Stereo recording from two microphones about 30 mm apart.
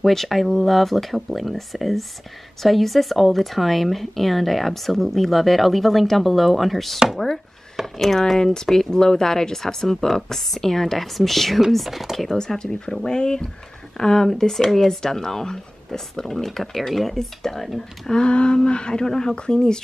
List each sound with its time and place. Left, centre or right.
0.0 s a woman's voice: centre
8.4 s a woman's voice: centre
12.3 s speech: centre
12.5 s speech: left; by 17.6 s centre
18.1 s speech: left
19.0 s speech: centre
19.3 s speech: left